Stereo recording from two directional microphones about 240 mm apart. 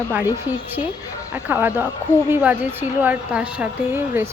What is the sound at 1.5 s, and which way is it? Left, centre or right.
A woman's voice, centre.